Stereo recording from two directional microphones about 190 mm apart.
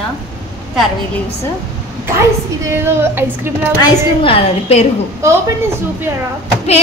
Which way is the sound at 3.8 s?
30° left (ahead or behind).